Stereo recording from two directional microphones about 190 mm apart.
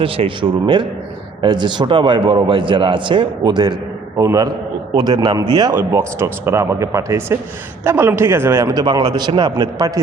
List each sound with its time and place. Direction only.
0.0 s a man's voice: 30° right (ahead or behind)